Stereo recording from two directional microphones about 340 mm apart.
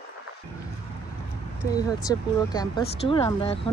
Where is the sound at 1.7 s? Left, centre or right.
Centre.